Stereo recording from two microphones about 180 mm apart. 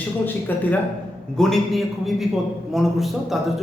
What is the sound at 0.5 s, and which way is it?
A man's voice, 10° left (ahead or behind).